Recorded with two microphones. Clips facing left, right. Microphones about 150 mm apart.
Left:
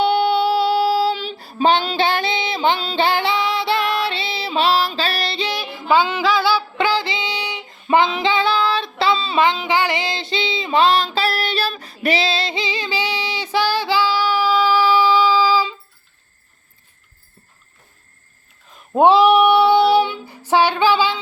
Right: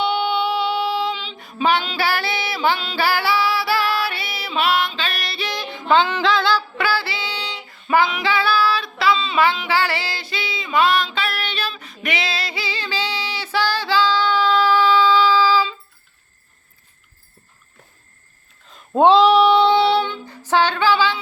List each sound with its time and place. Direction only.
0.0 s child singing: 40° left (ahead or behind)
2.0 s music: 20° left (ahead or behind)
5.5 s music: 5° left (ahead or behind)
6.7 s female singing: 20° left (ahead or behind)
7.9 s female singing: 25° left (ahead or behind)
9.4 s female singing: 20° left (ahead or behind)
18.9 s female singing: 10° left (ahead or behind)